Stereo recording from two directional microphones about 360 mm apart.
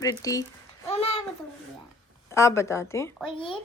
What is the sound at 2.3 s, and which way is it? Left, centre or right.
Speech, centre.